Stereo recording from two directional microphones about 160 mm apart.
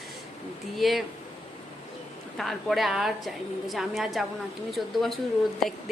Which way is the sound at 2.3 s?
Centre (ahead or behind).